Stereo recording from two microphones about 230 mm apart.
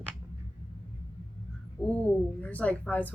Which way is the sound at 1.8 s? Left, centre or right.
Centre.